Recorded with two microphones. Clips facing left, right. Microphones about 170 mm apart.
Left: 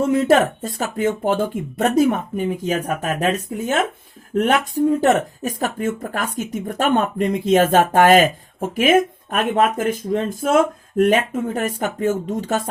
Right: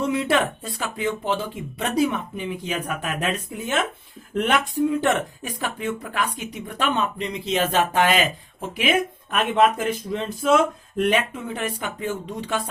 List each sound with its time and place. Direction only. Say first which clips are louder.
0.0 s speech: left 6 dB; 45° left (ahead or behind)